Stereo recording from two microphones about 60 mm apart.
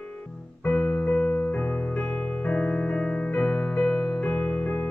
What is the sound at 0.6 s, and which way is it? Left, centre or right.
Keyboard, centre.